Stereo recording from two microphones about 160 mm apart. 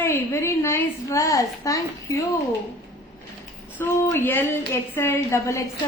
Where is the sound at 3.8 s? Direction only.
10° left (ahead or behind).